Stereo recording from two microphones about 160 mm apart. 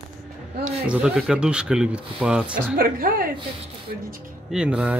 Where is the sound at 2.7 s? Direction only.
65° right (ahead or behind).